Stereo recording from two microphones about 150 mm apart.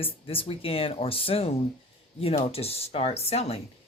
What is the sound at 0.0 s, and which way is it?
A woman's voice, 40° left (ahead or behind).